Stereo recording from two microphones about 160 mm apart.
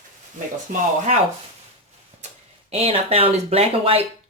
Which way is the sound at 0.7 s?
50° right (ahead or behind).